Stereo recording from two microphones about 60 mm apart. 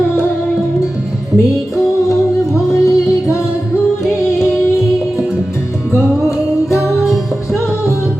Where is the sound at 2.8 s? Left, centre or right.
Left.